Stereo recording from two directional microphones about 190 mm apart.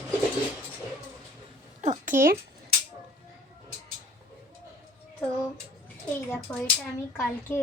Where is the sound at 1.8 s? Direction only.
40° right (ahead or behind).